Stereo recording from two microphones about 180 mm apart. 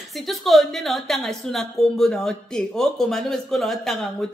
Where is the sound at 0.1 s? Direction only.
Centre (ahead or behind).